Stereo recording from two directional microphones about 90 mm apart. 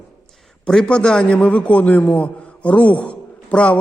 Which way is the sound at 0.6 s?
10° left (ahead or behind).